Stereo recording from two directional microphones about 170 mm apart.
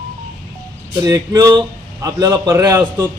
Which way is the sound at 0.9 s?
20° right (ahead or behind).